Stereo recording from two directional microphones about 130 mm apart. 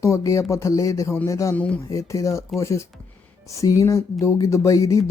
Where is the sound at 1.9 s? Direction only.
25° left (ahead or behind).